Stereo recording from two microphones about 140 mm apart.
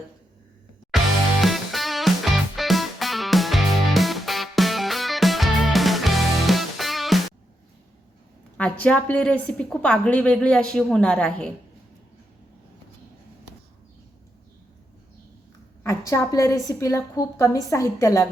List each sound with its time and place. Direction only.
0.9 s music: centre (ahead or behind)
8.5 s a woman's voice: 10° left (ahead or behind)
15.8 s a woman's voice: 20° left (ahead or behind)